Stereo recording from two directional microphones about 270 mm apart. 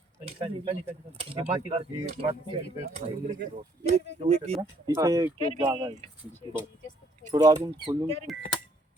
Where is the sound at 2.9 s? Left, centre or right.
Right.